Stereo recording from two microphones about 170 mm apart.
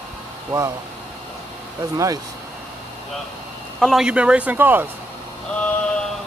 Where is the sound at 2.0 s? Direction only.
20° right (ahead or behind).